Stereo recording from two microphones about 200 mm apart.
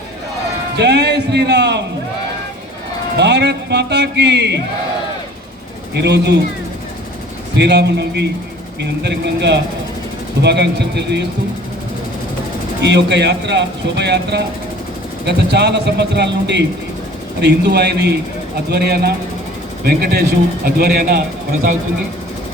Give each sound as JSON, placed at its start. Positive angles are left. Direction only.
{"t": 0.8, "sound": "speech", "side_deg": -55}
{"t": 3.2, "sound": "speech", "side_deg": -60}
{"t": 5.9, "sound": "speech", "side_deg": -55}
{"t": 7.6, "sound": "speech", "side_deg": -60}
{"t": 12.8, "sound": "speech", "side_deg": -60}